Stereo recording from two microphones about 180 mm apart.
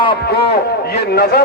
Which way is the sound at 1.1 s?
60° left (ahead or behind).